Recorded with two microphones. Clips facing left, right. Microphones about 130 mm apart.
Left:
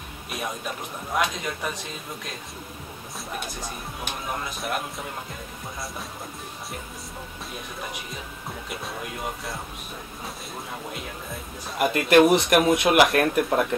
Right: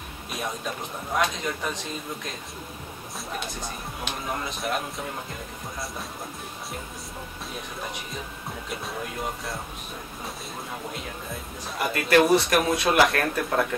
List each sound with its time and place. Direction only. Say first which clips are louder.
1.1 s music: even; 5° left (ahead or behind)
4.6 s music: right 1 dB; centre (ahead or behind)
8.6 s music: right 1 dB; centre (ahead or behind)
11.8 s speech: left 3 dB; 20° left (ahead or behind)